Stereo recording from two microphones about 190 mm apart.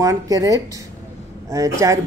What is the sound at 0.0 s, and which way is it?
Speech, 20° right (ahead or behind).